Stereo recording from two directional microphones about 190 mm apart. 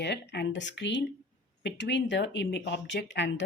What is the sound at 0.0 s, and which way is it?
Speech, 65° left (ahead or behind).